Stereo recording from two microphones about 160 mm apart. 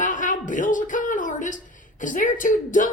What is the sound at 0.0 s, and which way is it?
A woman's voice, 55° left (ahead or behind).